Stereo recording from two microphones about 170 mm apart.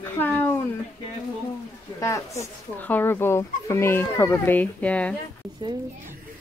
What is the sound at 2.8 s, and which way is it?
Speech, 10° left (ahead or behind).